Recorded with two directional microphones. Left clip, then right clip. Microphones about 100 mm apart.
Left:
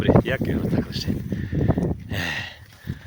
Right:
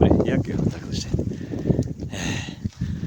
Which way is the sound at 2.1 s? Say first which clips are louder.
Left 3 dB; 20° right (ahead or behind).